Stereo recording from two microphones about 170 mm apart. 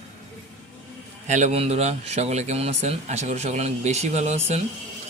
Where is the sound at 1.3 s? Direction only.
45° right (ahead or behind).